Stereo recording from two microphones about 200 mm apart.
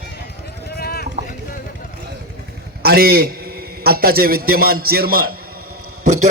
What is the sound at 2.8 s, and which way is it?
A man's voice, 50° right (ahead or behind).